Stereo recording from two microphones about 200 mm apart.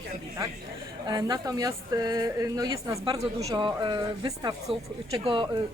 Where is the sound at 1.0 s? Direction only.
20° right (ahead or behind).